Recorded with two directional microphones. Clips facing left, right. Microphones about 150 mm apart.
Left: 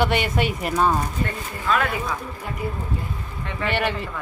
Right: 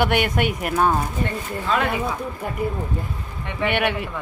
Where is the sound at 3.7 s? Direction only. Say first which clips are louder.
Right 2 dB; 65° right (ahead or behind).